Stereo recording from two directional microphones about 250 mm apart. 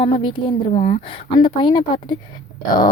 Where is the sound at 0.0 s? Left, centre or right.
Centre.